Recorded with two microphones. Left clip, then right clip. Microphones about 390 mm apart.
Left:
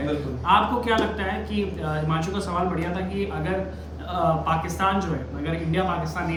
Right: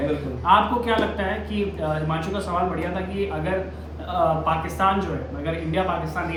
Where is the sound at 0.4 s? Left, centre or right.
Centre.